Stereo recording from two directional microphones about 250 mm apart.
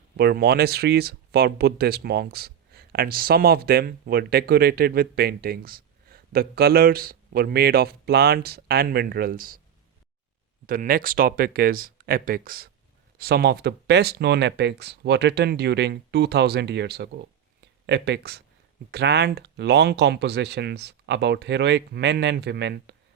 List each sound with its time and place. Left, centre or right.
0.2 s speech: right
10.7 s speech: right